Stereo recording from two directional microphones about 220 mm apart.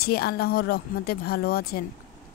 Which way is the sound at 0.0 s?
45° left (ahead or behind).